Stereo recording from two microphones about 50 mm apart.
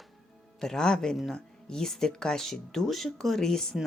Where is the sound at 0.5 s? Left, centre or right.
Centre.